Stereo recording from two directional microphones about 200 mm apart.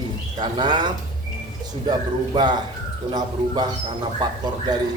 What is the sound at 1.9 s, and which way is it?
A man's voice, 20° right (ahead or behind).